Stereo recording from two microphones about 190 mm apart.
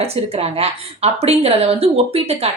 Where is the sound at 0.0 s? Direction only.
35° right (ahead or behind).